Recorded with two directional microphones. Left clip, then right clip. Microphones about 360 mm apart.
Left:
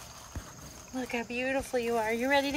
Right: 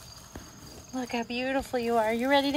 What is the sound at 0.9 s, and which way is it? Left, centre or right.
Speech, centre.